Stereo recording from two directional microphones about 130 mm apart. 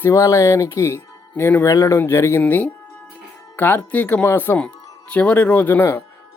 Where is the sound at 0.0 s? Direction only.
20° left (ahead or behind).